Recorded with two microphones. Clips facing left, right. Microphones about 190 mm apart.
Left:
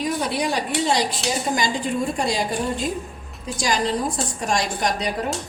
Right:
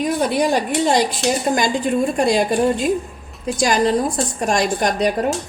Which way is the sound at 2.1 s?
55° right (ahead or behind).